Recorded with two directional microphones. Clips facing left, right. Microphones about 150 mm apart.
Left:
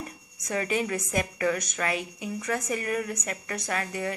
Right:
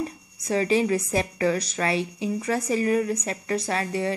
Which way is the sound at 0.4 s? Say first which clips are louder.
Right 6 dB; 30° right (ahead or behind).